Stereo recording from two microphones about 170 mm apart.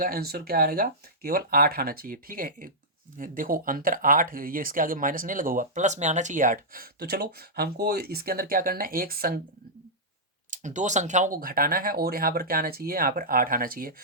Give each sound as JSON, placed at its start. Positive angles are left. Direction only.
{"t": 0.0, "sound": "speech", "side_deg": -65}
{"t": 10.5, "sound": "speech", "side_deg": -45}